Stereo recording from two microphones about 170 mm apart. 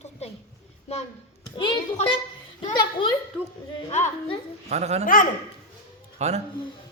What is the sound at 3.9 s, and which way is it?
Speech, 45° left (ahead or behind).